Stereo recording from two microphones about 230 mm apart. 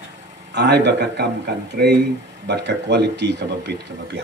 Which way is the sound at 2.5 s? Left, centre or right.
Right.